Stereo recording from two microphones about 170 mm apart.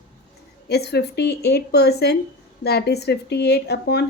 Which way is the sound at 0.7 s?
75° left (ahead or behind).